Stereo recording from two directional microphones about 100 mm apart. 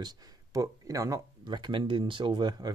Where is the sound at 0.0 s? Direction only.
40° right (ahead or behind).